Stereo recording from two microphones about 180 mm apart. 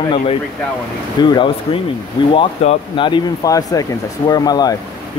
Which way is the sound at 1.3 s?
30° left (ahead or behind).